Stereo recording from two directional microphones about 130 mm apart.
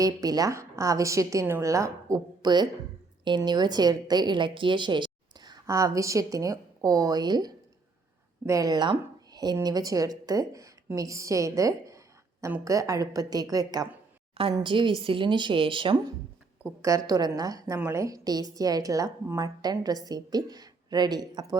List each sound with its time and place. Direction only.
0.0 s a woman's voice: 30° right (ahead or behind)
17.1 s a woman's voice: 30° right (ahead or behind)